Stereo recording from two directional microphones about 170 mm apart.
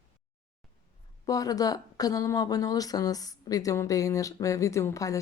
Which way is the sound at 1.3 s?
20° left (ahead or behind).